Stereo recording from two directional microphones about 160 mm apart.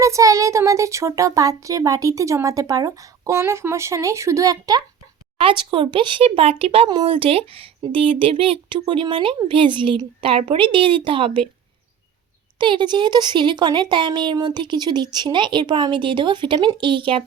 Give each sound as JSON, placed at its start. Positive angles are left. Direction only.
{"t": 0.0, "sound": "a child's voice", "side_deg": -20}
{"t": 5.4, "sound": "speech", "side_deg": -35}
{"t": 12.5, "sound": "a child's voice", "side_deg": -30}